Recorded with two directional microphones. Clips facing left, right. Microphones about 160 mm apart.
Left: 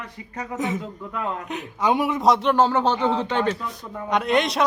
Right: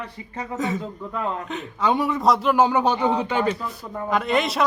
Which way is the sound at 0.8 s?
30° right (ahead or behind).